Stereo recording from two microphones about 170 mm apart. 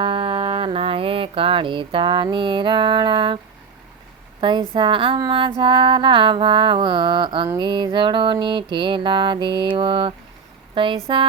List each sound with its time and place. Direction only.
0.0 s mantra: 30° right (ahead or behind)